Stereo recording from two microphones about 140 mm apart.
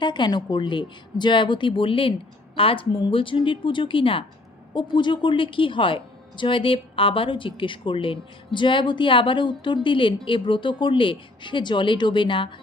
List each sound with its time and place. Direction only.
0.0 s a woman's voice: 35° left (ahead or behind)